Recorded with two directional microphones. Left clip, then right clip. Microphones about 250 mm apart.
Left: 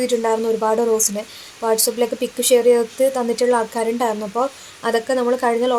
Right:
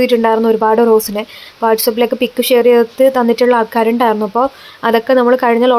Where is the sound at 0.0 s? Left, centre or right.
Right.